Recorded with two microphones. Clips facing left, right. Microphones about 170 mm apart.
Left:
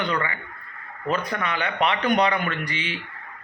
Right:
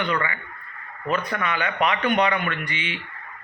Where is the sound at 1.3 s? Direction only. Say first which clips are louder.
Right 1 dB; 35° left (ahead or behind).